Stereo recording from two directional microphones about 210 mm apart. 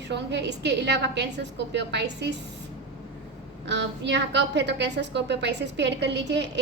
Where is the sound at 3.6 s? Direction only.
55° right (ahead or behind).